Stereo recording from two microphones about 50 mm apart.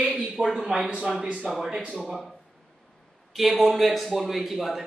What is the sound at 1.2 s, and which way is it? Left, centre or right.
Speech, centre.